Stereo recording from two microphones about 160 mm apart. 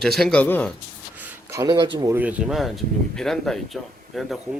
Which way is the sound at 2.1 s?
5° right (ahead or behind).